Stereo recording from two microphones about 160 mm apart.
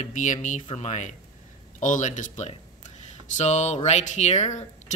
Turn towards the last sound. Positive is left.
turn(degrees=45)  # may be behind; listen again after turning